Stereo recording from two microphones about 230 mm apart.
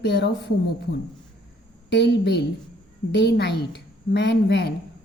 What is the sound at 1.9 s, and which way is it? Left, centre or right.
A woman's voice, left.